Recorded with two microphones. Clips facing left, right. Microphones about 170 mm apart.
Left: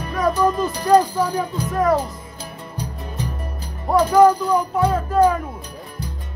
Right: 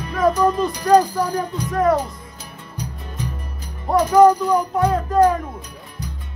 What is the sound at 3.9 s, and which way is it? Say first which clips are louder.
Speech: right 1 dB; centre (ahead or behind).